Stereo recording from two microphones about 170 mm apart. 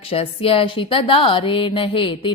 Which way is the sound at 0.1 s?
35° left (ahead or behind).